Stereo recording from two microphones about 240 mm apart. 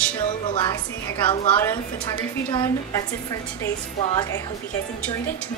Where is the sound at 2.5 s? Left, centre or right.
Centre.